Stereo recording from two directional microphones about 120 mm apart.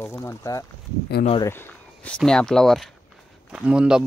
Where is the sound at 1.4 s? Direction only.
15° left (ahead or behind).